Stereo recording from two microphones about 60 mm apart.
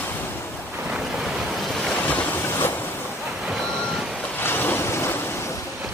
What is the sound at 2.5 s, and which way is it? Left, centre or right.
Ocean, left.